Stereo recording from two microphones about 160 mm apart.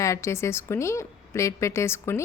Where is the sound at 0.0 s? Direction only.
20° left (ahead or behind).